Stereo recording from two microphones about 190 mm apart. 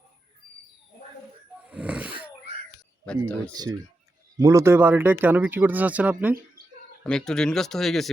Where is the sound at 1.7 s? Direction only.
5° right (ahead or behind).